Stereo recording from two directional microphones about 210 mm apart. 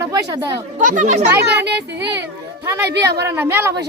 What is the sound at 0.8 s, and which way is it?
Speech, 35° right (ahead or behind).